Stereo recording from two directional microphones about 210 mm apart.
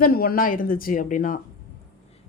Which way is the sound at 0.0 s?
45° left (ahead or behind).